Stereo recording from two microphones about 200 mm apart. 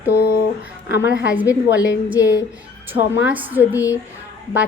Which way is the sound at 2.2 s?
15° left (ahead or behind).